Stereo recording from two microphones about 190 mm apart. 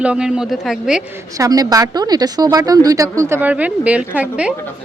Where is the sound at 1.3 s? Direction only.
20° right (ahead or behind).